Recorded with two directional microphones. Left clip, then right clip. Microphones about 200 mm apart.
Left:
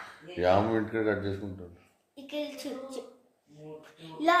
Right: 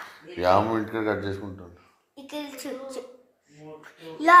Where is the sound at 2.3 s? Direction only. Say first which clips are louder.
Even; 20° left (ahead or behind).